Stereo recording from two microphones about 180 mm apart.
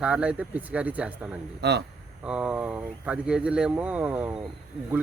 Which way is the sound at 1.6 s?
70° right (ahead or behind).